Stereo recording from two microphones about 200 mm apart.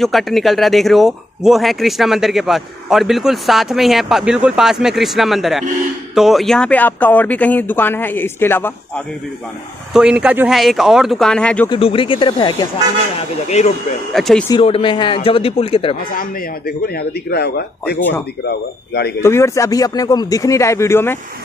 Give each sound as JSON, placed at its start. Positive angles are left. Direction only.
{"t": 0.0, "sound": "speech", "side_deg": 0}
{"t": 9.9, "sound": "speech", "side_deg": -5}
{"t": 11.7, "sound": "speech", "side_deg": 25}
{"t": 14.1, "sound": "speech", "side_deg": 0}
{"t": 14.5, "sound": "speech", "side_deg": 25}
{"t": 16.1, "sound": "speech", "side_deg": 45}
{"t": 19.2, "sound": "speech", "side_deg": 15}